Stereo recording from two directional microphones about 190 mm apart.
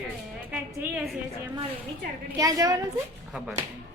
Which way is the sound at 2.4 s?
20° right (ahead or behind).